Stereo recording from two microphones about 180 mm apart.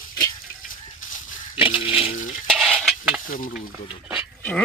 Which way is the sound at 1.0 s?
45° left (ahead or behind).